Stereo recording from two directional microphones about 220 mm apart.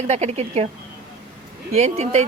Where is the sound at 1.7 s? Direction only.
30° right (ahead or behind).